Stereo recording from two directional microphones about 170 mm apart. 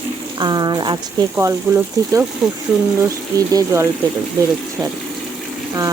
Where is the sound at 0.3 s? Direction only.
25° right (ahead or behind).